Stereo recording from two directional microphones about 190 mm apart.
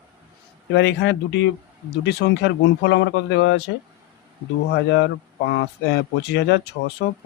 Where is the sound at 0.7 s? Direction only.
70° left (ahead or behind).